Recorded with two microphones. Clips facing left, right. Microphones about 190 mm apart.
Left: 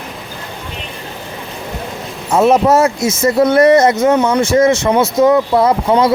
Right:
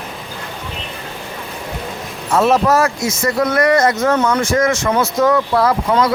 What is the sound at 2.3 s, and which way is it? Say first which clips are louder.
Speech: left 3 dB; 20° left (ahead or behind).